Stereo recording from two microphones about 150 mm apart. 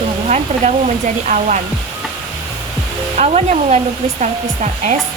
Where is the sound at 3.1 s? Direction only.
50° right (ahead or behind).